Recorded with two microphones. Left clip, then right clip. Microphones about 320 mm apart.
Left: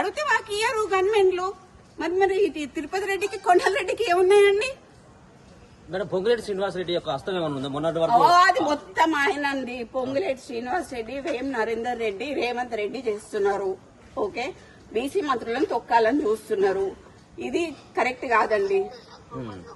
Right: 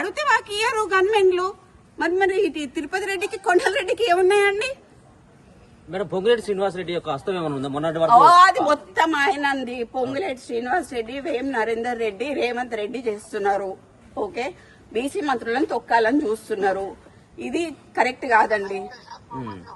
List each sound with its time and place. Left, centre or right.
0.0 s a woman's voice: centre
5.9 s a man's voice: right
8.2 s a woman's voice: centre
14.9 s a woman's voice: centre